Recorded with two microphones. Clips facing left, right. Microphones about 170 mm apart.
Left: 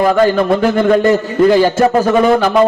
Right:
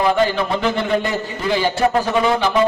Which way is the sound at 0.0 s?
45° left (ahead or behind).